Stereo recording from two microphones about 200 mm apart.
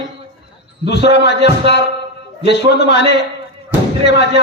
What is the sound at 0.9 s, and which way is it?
Music, 60° left (ahead or behind).